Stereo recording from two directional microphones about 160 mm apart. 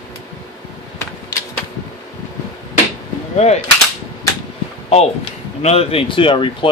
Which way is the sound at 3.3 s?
45° left (ahead or behind).